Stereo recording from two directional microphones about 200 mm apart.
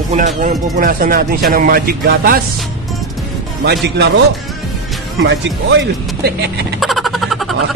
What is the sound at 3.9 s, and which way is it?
Speech, 60° right (ahead or behind).